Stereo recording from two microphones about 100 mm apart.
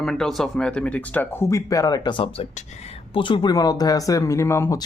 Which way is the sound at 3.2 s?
55° left (ahead or behind).